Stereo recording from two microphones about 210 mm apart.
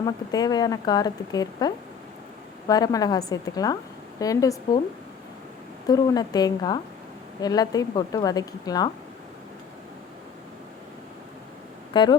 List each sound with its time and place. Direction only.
0.0 s a woman's voice: 20° left (ahead or behind)
5.9 s a woman's voice: 20° left (ahead or behind)
11.9 s speech: 25° left (ahead or behind)